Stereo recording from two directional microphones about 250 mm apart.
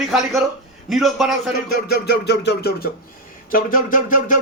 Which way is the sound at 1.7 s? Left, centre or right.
Left.